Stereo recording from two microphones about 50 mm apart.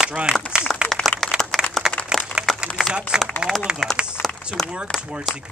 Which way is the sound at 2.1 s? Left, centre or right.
Centre.